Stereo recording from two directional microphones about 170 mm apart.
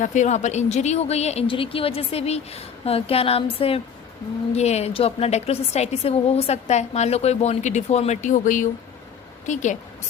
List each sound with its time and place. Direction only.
0.0 s a woman's voice: 45° left (ahead or behind)